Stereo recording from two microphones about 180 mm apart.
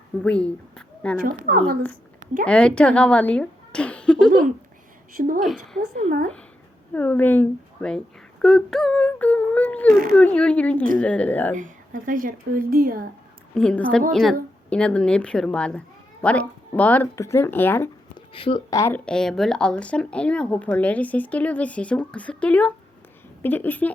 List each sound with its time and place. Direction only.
0.2 s speech: 5° left (ahead or behind)
1.5 s speech: 60° right (ahead or behind)
2.4 s a woman's voice: 5° left (ahead or behind)
5.2 s speech: 45° right (ahead or behind)
5.5 s a woman's voice: 5° left (ahead or behind)
6.1 s speech: 40° right (ahead or behind)
6.9 s speech: 10° left (ahead or behind)
9.8 s speech: 55° right (ahead or behind)
10.2 s speech: 5° left (ahead or behind)
11.5 s speech: 45° right (ahead or behind)
13.5 s a woman's voice: 5° left (ahead or behind)
18.3 s speech: 30° left (ahead or behind)
18.8 s speech: 10° left (ahead or behind)